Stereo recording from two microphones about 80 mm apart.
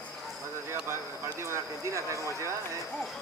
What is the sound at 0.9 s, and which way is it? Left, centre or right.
Speech, right.